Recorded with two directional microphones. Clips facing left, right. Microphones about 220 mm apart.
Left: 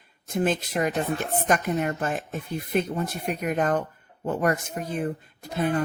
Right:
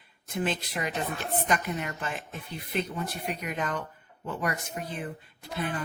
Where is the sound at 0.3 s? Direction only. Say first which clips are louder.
Left 6 dB; 45° left (ahead or behind).